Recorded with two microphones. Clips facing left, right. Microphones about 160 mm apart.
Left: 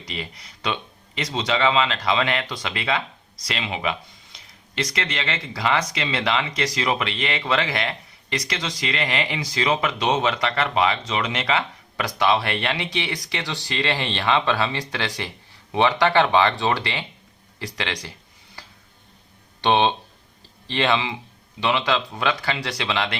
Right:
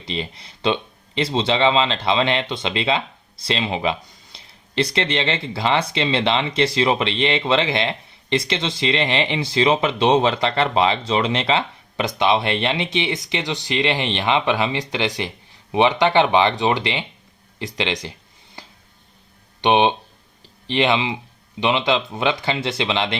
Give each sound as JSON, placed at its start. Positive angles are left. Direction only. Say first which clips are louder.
{"t": 0.0, "sound": "speech", "louder": "right 5 dB", "side_deg": -25}
{"t": 17.6, "sound": "a sound", "louder": "right 5 dB", "side_deg": -20}
{"t": 19.6, "sound": "speech", "louder": "right 3 dB", "side_deg": -15}